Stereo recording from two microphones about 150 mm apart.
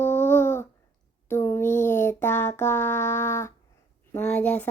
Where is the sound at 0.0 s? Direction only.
15° left (ahead or behind).